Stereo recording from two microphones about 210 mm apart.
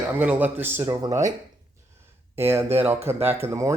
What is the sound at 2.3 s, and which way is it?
Speech, 10° right (ahead or behind).